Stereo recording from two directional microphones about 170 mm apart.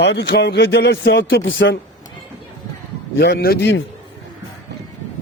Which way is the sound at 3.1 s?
65° left (ahead or behind).